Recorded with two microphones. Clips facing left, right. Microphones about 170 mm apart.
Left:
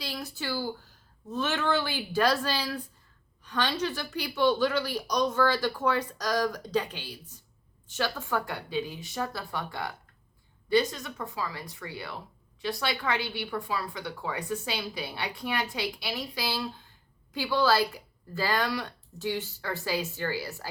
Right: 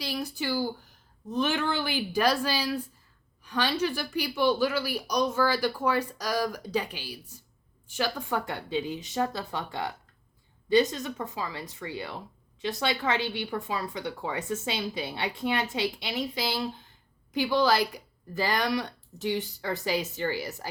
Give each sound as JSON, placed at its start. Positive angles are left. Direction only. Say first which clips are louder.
{"t": 0.0, "sound": "a woman's voice", "louder": "right 4 dB", "side_deg": -15}